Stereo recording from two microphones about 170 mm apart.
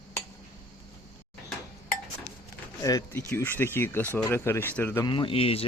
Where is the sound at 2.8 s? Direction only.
20° left (ahead or behind).